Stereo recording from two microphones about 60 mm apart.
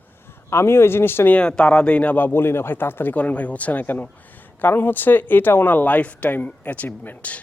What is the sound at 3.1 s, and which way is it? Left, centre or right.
Speech, left.